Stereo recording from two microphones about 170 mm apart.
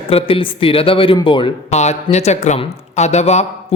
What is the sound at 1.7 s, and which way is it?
A man's voice, 40° left (ahead or behind).